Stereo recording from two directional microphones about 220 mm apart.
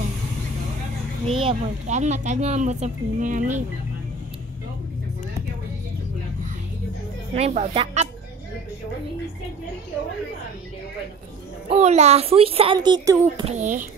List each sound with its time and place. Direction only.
1.2 s speech: 25° right (ahead or behind)
7.3 s speech: 30° right (ahead or behind)
11.7 s speech: 30° right (ahead or behind)
13.5 s speech: 35° right (ahead or behind)